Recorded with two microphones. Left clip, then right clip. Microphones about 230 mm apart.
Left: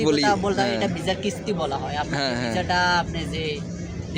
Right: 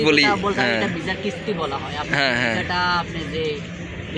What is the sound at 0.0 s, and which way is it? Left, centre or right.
Speech, centre.